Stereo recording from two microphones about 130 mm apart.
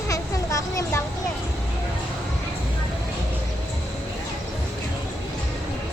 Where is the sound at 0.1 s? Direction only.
25° left (ahead or behind).